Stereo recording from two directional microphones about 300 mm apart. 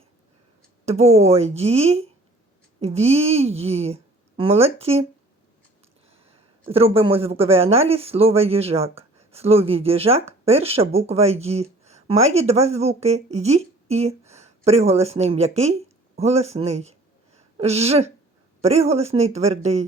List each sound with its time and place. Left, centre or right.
0.9 s a woman's voice: right
6.1 s a woman's voice: centre